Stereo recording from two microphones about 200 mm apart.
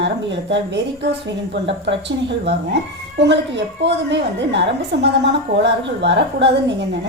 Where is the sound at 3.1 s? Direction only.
60° right (ahead or behind).